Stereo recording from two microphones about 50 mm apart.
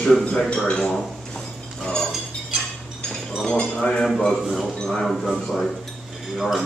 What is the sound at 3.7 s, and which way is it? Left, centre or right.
Speech, centre.